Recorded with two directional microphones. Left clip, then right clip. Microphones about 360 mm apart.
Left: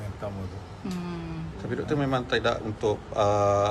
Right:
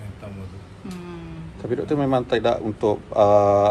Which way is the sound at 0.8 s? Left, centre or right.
Centre.